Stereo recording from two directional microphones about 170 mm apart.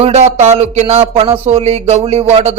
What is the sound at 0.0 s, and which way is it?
Speech, 40° right (ahead or behind).